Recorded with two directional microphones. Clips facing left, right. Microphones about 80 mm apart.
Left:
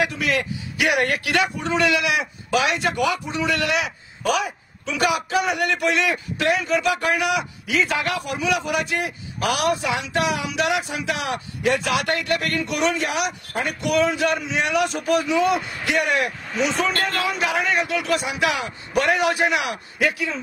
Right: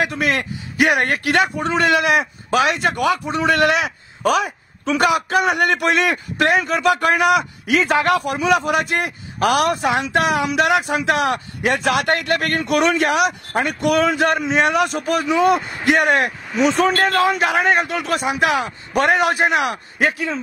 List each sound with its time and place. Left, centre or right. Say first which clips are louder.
0.0 s a man's voice: right 2 dB; right